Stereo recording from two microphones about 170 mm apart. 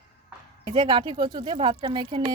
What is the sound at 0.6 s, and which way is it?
Speech, 30° right (ahead or behind).